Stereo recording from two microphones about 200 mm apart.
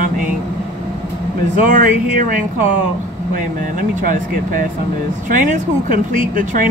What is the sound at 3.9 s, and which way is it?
Speech, 40° right (ahead or behind).